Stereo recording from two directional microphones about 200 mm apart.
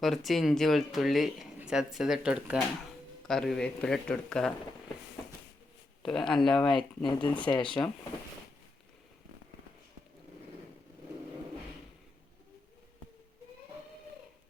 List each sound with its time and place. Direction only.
0.0 s speech: centre (ahead or behind)
6.1 s speech: centre (ahead or behind)
6.7 s speech: 25° left (ahead or behind)